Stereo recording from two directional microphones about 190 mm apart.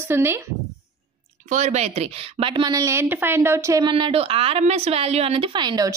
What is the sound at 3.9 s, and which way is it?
A woman's voice, 30° right (ahead or behind).